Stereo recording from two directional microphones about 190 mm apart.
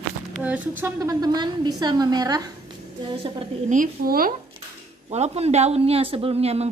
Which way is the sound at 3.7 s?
45° right (ahead or behind).